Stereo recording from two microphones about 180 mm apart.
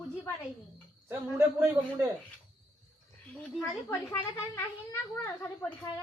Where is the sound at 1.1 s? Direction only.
15° right (ahead or behind).